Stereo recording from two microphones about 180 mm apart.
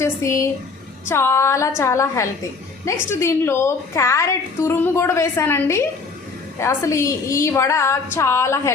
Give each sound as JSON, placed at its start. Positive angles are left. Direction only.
{"t": 0.0, "sound": "a woman's voice", "side_deg": 15}